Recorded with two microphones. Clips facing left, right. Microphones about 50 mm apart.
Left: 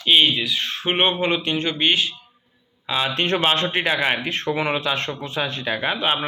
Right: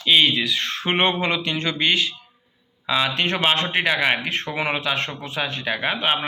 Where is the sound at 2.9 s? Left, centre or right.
Right.